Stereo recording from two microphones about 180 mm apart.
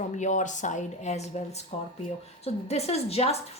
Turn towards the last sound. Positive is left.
turn(degrees=35)  # may be behind; listen again after turning